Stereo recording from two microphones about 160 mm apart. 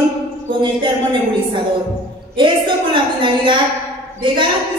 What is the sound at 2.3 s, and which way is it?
A woman's voice, 30° right (ahead or behind).